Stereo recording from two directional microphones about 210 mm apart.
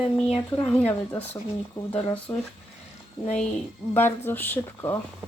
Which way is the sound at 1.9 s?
25° left (ahead or behind).